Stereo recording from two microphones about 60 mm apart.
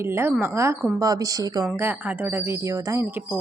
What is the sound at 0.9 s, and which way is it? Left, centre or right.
Speech, right.